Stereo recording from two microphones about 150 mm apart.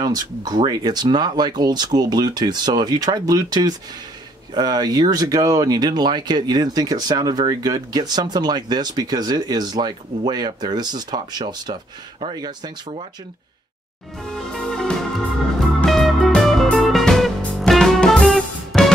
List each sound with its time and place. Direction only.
0.0 s speech: 25° right (ahead or behind)
14.3 s music: 5° left (ahead or behind)